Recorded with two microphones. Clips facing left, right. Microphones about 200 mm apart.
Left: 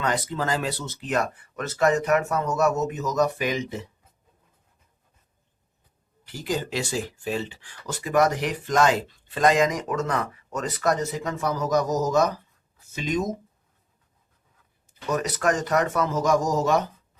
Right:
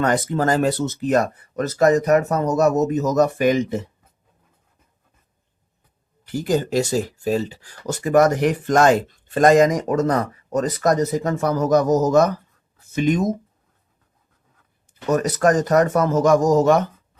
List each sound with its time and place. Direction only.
0.0 s speech: 50° right (ahead or behind)
6.2 s speech: 50° right (ahead or behind)
15.1 s speech: 45° right (ahead or behind)